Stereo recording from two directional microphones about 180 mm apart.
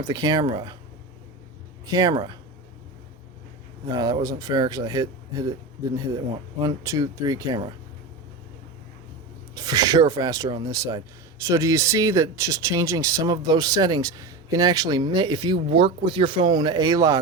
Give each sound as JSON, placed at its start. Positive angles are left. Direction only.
{"t": 0.0, "sound": "speech", "side_deg": -20}
{"t": 1.9, "sound": "speech", "side_deg": -20}
{"t": 3.9, "sound": "speech", "side_deg": -20}
{"t": 6.6, "sound": "speech", "side_deg": -20}
{"t": 9.6, "sound": "speech", "side_deg": -20}